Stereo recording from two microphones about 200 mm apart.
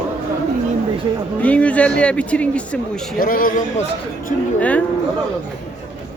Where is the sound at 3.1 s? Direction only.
45° left (ahead or behind).